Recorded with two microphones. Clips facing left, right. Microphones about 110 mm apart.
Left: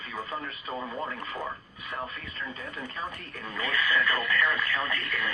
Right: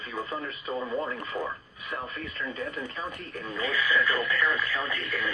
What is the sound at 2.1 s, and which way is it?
Speech, 40° right (ahead or behind).